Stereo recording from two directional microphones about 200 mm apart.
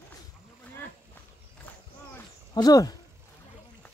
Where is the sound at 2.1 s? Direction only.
20° left (ahead or behind).